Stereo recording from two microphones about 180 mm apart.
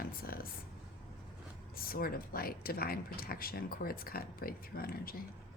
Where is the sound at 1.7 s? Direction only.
55° left (ahead or behind).